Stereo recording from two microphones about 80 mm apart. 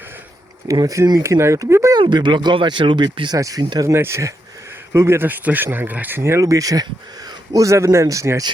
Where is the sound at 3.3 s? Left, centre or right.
Right.